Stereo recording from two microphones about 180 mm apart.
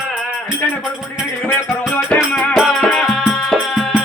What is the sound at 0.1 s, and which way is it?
Music, 5° right (ahead or behind).